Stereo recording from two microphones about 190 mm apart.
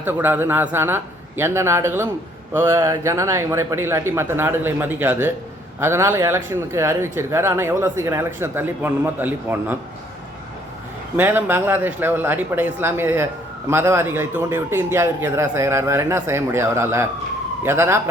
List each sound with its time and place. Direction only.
0.0 s speech: 10° right (ahead or behind)
11.2 s speech: 10° right (ahead or behind)